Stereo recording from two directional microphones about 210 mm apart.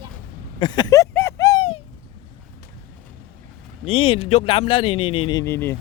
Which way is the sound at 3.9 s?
25° left (ahead or behind).